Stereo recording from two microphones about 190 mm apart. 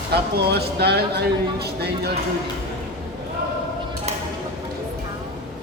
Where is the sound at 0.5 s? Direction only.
60° right (ahead or behind).